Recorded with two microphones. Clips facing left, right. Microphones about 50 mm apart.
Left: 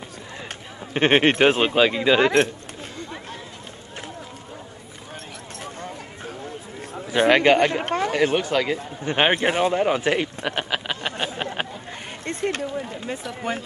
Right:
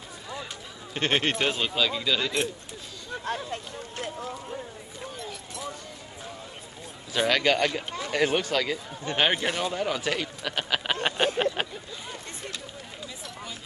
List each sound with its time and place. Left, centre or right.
0.9 s speech: left
7.1 s speech: left
7.7 s speech: left
8.1 s speech: centre
9.0 s speech: left
11.0 s a sound: centre
12.3 s speech: left